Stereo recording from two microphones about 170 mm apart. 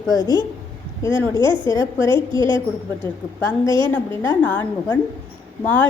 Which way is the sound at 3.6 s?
30° right (ahead or behind).